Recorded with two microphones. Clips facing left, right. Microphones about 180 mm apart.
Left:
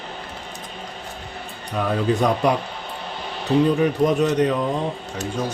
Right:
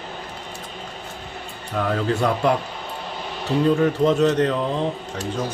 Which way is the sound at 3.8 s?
15° left (ahead or behind).